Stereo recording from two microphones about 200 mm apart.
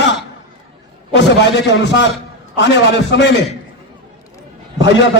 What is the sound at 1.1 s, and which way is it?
A man's voice, 60° left (ahead or behind).